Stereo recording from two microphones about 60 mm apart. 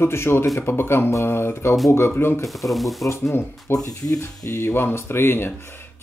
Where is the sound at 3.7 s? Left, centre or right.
Left.